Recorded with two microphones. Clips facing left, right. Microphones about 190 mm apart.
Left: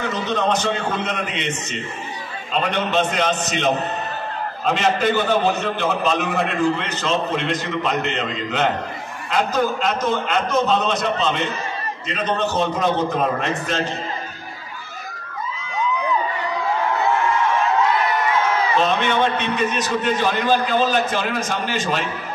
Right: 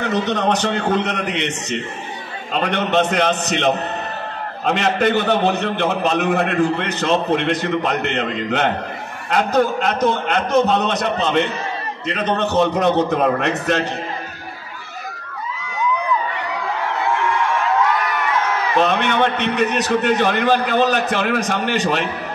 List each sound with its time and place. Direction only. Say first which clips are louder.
0.0 s a man's voice: right 3 dB; 65° right (ahead or behind)
18.8 s a man's voice: right 4 dB; 60° right (ahead or behind)